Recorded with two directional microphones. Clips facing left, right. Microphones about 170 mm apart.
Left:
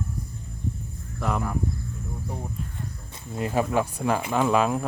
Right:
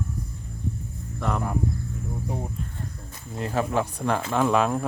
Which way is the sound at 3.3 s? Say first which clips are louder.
Left 1 dB; 10° left (ahead or behind).